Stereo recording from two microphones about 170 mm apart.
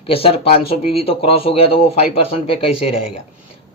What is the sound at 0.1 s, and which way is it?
A man's voice, 35° left (ahead or behind).